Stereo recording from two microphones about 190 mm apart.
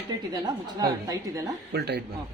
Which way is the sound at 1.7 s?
60° right (ahead or behind).